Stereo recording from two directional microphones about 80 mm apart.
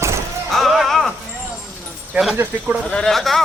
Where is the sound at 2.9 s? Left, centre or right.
Centre.